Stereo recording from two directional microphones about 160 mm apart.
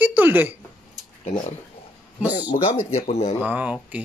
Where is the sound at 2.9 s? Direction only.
40° left (ahead or behind).